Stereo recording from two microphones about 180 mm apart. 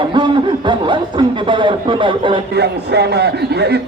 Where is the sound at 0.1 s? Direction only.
25° right (ahead or behind).